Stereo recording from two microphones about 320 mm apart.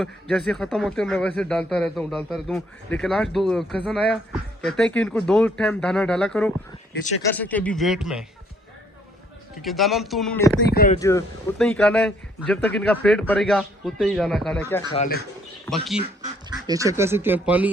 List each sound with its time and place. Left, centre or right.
0.0 s speech: centre
9.6 s speech: centre
10.7 s speech: left
11.0 s speech: centre
14.9 s speech: left
16.2 s speech: centre